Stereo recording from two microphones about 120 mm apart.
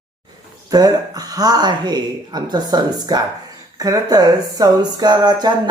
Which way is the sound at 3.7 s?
30° right (ahead or behind).